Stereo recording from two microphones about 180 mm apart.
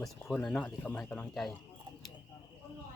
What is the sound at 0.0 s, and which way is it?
Speech, 5° left (ahead or behind).